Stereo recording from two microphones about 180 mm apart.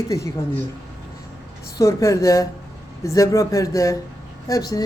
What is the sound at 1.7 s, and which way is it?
Speech, 15° left (ahead or behind).